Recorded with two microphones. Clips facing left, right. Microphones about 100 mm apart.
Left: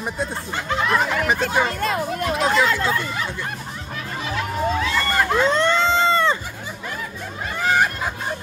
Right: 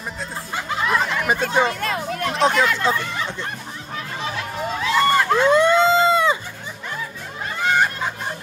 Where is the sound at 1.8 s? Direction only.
10° left (ahead or behind).